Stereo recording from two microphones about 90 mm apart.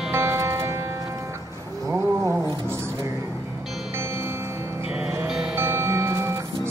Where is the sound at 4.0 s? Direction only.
30° right (ahead or behind).